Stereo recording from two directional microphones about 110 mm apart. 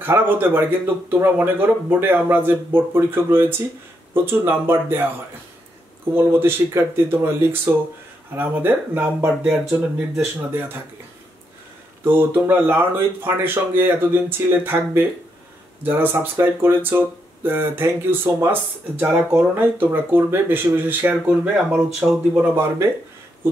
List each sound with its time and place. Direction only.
0.0 s speech: 20° right (ahead or behind)
6.1 s speech: 20° right (ahead or behind)
8.4 s speech: 20° right (ahead or behind)
12.0 s speech: 20° right (ahead or behind)